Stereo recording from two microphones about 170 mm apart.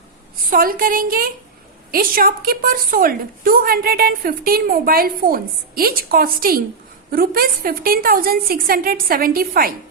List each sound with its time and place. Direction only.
0.5 s a woman's voice: 55° right (ahead or behind)